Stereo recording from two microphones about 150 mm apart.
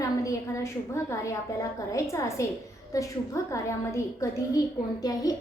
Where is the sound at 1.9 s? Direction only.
20° left (ahead or behind).